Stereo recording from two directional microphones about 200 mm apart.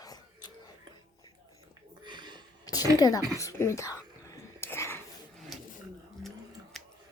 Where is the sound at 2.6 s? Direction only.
20° left (ahead or behind).